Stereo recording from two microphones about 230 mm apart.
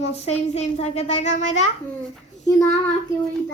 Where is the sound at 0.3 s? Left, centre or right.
Left.